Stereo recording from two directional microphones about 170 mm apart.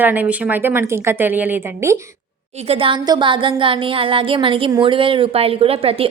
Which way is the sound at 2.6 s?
35° right (ahead or behind).